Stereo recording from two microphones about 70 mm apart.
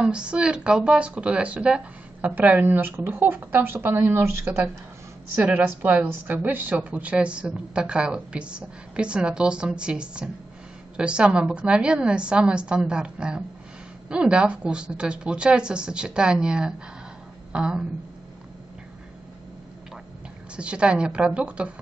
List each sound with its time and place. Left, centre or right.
0.0 s a woman's voice: centre; by 4.2 s right
5.4 s a woman's voice: right
20.5 s a woman's voice: centre